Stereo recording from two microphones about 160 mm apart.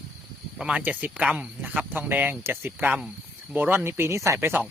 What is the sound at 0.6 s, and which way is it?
Speech, 10° right (ahead or behind).